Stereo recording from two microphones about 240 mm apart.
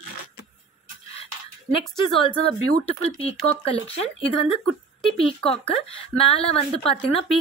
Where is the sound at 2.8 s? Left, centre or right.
Left.